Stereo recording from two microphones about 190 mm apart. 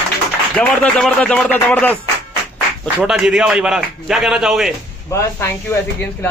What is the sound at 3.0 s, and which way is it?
A man's voice, 5° right (ahead or behind).